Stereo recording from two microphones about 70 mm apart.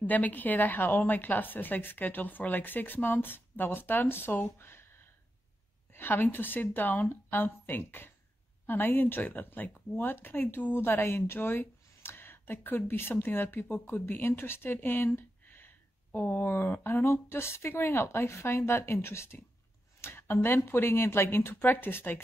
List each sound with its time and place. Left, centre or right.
0.0 s a woman's voice: left
5.9 s a woman's voice: left